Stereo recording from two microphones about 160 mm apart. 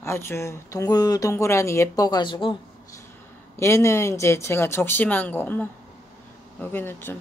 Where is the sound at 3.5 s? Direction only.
15° left (ahead or behind).